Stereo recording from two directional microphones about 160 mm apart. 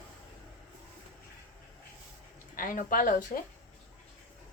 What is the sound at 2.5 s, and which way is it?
Speech, 60° left (ahead or behind).